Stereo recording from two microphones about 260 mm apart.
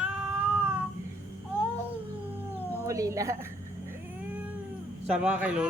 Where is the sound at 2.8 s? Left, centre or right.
Centre.